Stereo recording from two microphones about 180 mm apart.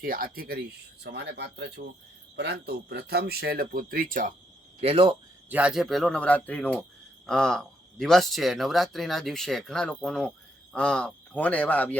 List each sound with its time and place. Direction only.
0.0 s speech: 55° right (ahead or behind)
1.0 s a man's voice: 70° right (ahead or behind); by 4.4 s 50° right (ahead or behind)
4.8 s speech: 30° right (ahead or behind)
5.5 s speech: 5° right (ahead or behind); by 11.9 s 10° left (ahead or behind)